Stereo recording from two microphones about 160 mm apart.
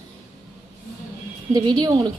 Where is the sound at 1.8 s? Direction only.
25° right (ahead or behind).